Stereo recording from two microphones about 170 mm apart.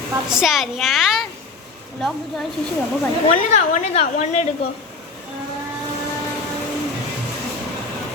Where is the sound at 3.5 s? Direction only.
40° left (ahead or behind).